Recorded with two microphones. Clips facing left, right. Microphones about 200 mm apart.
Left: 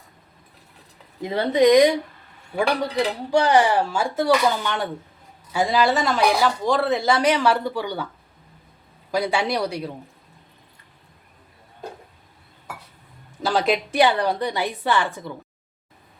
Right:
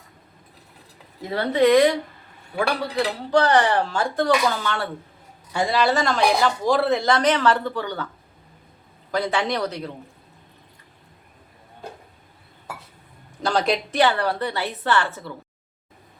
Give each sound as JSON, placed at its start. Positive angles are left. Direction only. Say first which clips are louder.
{"t": 1.2, "sound": "speech", "louder": "left 1 dB", "side_deg": 15}
{"t": 5.5, "sound": "speech", "louder": "left 1 dB", "side_deg": 0}
{"t": 9.1, "sound": "speech", "louder": "left 1 dB", "side_deg": 10}
{"t": 13.4, "sound": "speech", "louder": "left 1 dB", "side_deg": 5}
{"t": 14.0, "sound": "speech", "louder": "left 1 dB", "side_deg": 15}